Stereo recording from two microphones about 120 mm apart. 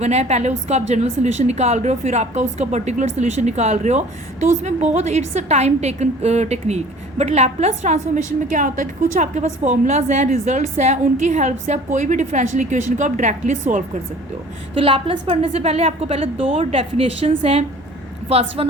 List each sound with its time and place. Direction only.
0.0 s a woman's voice: 65° right (ahead or behind)
8.0 s a woman's voice: 90° right
14.8 s a woman's voice: 50° right (ahead or behind)